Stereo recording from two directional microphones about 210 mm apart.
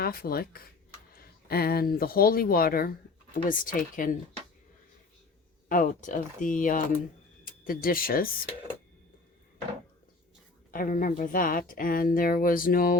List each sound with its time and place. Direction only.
0.0 s speech: 45° left (ahead or behind)
5.6 s speech: 40° left (ahead or behind)
10.7 s speech: 40° left (ahead or behind)